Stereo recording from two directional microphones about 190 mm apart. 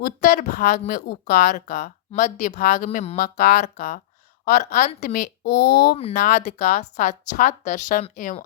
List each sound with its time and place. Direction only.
0.0 s speech: 45° left (ahead or behind)
0.6 s speech: 55° left (ahead or behind)
1.5 s speech: 40° left (ahead or behind)
3.2 s speech: 50° left (ahead or behind)
3.6 s speech: 40° left (ahead or behind)
4.4 s speech: 55° left (ahead or behind)
4.9 s speech: 45° left (ahead or behind)
6.0 s speech: 30° left (ahead or behind)